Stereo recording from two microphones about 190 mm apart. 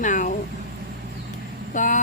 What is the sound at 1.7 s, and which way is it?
Vehicle, 45° left (ahead or behind).